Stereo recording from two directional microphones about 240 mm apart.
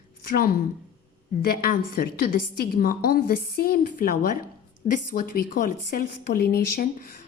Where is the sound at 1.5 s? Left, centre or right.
Left.